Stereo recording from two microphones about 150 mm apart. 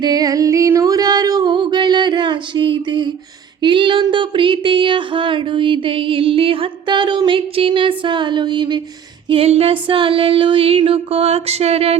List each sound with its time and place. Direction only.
0.0 s music: 25° right (ahead or behind)
3.6 s a sound: 35° right (ahead or behind)
9.3 s music: 40° right (ahead or behind)